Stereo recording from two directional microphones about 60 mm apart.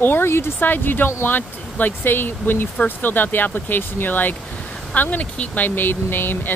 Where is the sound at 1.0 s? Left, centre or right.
Left.